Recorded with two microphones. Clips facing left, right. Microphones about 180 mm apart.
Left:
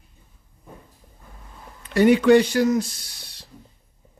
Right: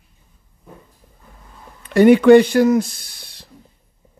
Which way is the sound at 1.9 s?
55° right (ahead or behind).